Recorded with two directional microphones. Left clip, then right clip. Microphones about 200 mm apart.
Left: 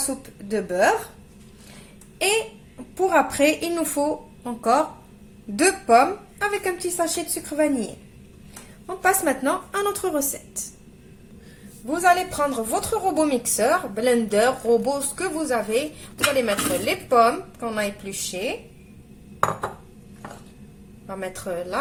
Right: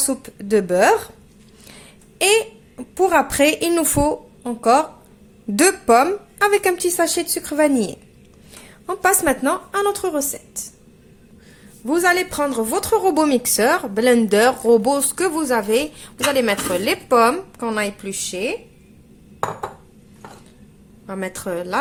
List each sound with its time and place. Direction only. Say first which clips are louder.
0.1 s a woman's voice: right 8 dB; 50° right (ahead or behind)
2.1 s a sound: right 6 dB; 45° right (ahead or behind)
2.9 s a woman's voice: right 3 dB; 40° right (ahead or behind)
5.5 s a woman's voice: right 3 dB; 50° right (ahead or behind)
8.9 s a woman's voice: right 3 dB; 40° right (ahead or behind); by 10.7 s 25° right (ahead or behind)
11.9 s a woman's voice: right 2 dB; 50° right (ahead or behind)
21.1 s a woman's voice: right 4 dB; 50° right (ahead or behind)